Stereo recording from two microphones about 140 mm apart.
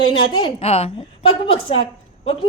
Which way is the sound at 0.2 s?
35° left (ahead or behind).